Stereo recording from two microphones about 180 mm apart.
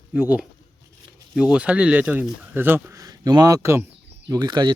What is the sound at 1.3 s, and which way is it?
Speech, 5° right (ahead or behind).